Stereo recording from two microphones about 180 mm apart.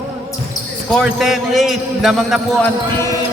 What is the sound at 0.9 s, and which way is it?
Speech, centre (ahead or behind).